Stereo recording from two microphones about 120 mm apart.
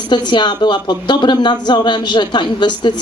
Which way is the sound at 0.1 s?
40° left (ahead or behind).